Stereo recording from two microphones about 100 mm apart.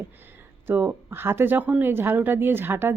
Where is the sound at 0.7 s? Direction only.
20° right (ahead or behind).